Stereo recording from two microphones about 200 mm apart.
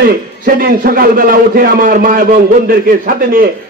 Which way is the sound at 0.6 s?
45° right (ahead or behind).